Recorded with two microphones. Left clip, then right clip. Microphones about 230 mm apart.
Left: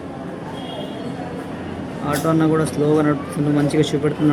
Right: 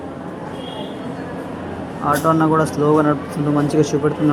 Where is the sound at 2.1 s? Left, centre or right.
Centre.